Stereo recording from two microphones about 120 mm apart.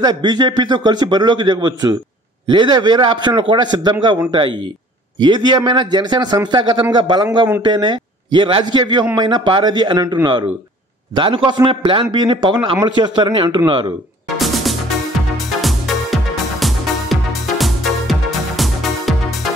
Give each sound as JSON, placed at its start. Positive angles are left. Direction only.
{"t": 0.0, "sound": "a man's voice", "side_deg": -35}
{"t": 11.1, "sound": "a man's voice", "side_deg": -45}
{"t": 14.4, "sound": "music", "side_deg": 0}